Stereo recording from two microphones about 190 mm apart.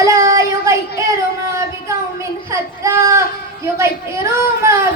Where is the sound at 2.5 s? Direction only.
15° right (ahead or behind).